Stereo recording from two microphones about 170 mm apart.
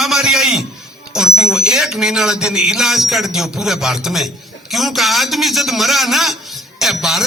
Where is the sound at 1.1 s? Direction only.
5° right (ahead or behind).